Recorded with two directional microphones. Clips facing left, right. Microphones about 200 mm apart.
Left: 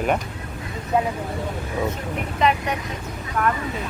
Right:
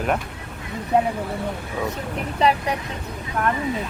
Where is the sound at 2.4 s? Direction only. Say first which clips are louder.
Right 1 dB; 35° right (ahead or behind).